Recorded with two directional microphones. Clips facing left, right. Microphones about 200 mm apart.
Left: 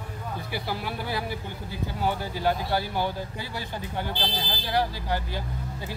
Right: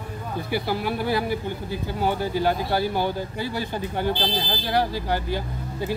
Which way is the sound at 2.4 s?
65° right (ahead or behind).